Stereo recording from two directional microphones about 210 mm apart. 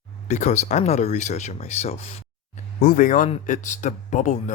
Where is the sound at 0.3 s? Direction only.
35° left (ahead or behind).